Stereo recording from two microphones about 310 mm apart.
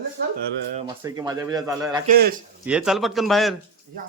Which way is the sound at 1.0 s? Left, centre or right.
Centre.